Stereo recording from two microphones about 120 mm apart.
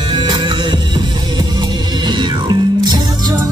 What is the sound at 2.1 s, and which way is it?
Music, 40° right (ahead or behind).